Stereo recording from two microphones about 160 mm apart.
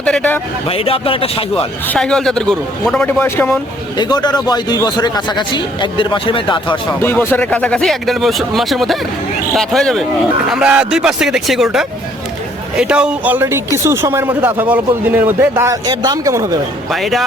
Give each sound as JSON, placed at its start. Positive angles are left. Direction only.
{"t": 0.0, "sound": "speech", "side_deg": 5}
{"t": 0.7, "sound": "speech", "side_deg": 35}
{"t": 1.9, "sound": "speech", "side_deg": 5}
{"t": 3.2, "sound": "speech", "side_deg": 15}
{"t": 3.9, "sound": "a man's voice", "side_deg": 25}
{"t": 7.0, "sound": "speech", "side_deg": 15}
{"t": 16.9, "sound": "speech", "side_deg": 0}